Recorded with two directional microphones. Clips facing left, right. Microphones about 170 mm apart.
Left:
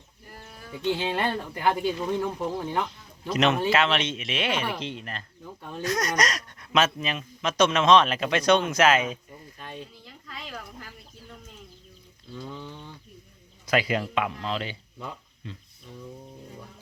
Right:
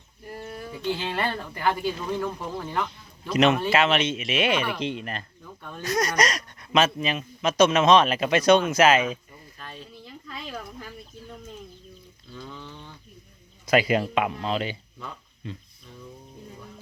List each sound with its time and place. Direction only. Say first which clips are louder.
0.8 s speech: left 2 dB; 15° left (ahead or behind)
2.8 s a man's voice: even; centre (ahead or behind); by 5.2 s 15° right (ahead or behind)
5.4 s speech: left 2 dB; 20° left (ahead or behind)
5.8 s speech: right 2 dB; centre (ahead or behind)
9.6 s speech: left 2 dB; 20° left (ahead or behind)
12.4 s speech: left 2 dB; 15° left (ahead or behind)
13.7 s speech: right 4 dB; 15° right (ahead or behind)